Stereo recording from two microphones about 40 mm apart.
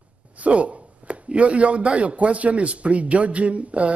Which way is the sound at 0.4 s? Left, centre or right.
Right.